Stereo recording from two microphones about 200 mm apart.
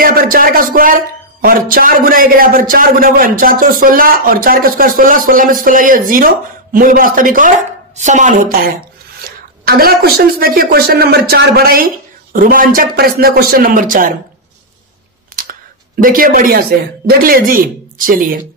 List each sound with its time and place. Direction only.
0.0 s a man's voice: 45° right (ahead or behind)
9.7 s a man's voice: 50° right (ahead or behind)
16.0 s a man's voice: 45° right (ahead or behind)